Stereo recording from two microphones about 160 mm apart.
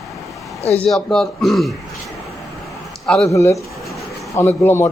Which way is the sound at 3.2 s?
20° left (ahead or behind).